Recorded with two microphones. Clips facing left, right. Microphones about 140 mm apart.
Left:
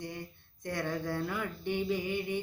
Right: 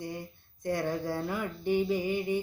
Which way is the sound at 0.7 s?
30° right (ahead or behind).